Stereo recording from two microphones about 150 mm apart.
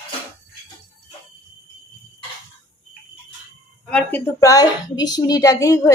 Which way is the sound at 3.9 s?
10° left (ahead or behind).